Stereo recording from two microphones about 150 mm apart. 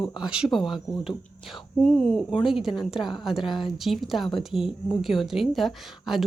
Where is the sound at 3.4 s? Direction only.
30° left (ahead or behind).